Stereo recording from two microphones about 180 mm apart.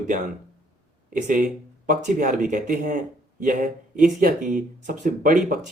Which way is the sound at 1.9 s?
50° right (ahead or behind).